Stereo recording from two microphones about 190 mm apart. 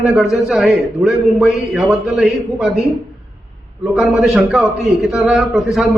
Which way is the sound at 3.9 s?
Centre (ahead or behind).